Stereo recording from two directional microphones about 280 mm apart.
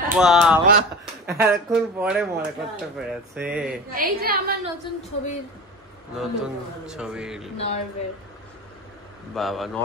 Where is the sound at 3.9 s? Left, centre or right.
Right.